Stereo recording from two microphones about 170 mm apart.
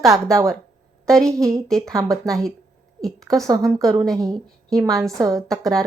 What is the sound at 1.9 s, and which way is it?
Speech, 20° right (ahead or behind).